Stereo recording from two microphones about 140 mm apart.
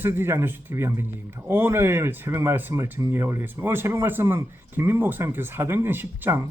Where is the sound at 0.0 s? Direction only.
15° right (ahead or behind).